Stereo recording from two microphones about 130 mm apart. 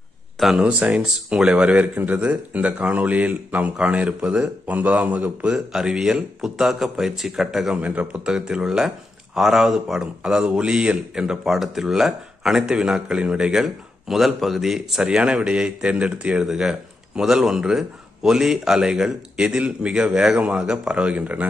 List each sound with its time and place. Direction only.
0.4 s speech: 5° right (ahead or behind)